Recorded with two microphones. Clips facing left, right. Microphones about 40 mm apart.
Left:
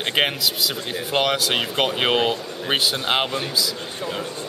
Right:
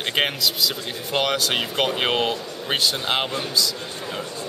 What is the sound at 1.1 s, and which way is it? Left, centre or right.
Speech, centre.